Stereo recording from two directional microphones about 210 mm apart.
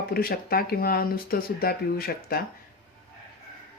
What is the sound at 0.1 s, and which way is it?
Speech, 45° left (ahead or behind).